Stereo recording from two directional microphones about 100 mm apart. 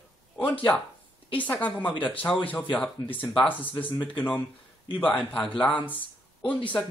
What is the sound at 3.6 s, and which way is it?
Speech, 15° left (ahead or behind).